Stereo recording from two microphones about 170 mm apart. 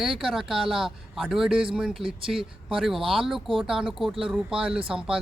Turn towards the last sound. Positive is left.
turn(degrees=-5)  # may be behind; listen again after turning